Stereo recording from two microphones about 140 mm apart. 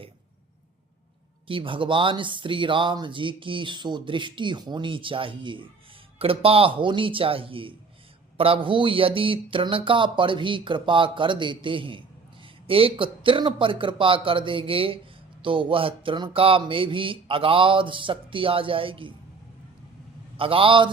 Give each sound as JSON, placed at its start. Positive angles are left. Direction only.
{"t": 1.5, "sound": "speech", "side_deg": -40}
{"t": 20.3, "sound": "speech", "side_deg": -40}